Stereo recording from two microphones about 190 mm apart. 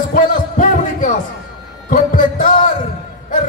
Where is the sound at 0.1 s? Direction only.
45° left (ahead or behind).